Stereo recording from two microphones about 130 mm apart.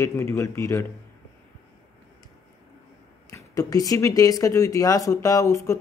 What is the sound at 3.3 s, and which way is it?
A man's voice, 25° left (ahead or behind).